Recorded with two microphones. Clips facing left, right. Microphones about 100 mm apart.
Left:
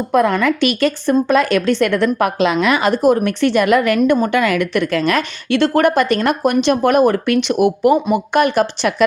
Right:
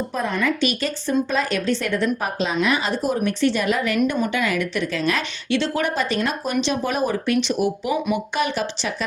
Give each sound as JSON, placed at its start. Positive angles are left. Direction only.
{"t": 0.1, "sound": "a woman's voice", "side_deg": 65}